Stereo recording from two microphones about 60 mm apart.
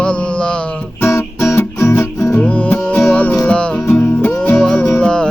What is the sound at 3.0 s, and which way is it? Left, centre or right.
Music, centre.